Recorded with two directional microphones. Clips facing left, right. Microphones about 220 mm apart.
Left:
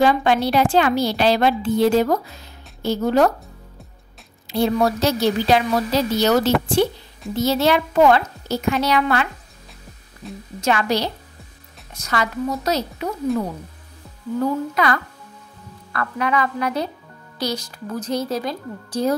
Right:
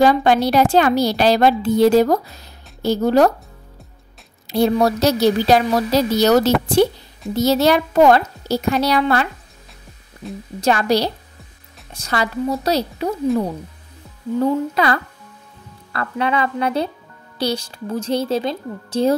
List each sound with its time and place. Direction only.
0.0 s a woman's voice: 40° right (ahead or behind)
4.5 s a woman's voice: 40° right (ahead or behind)
10.2 s a woman's voice: centre (ahead or behind)
10.6 s a woman's voice: 35° right (ahead or behind)
14.4 s a woman's voice: 30° right (ahead or behind)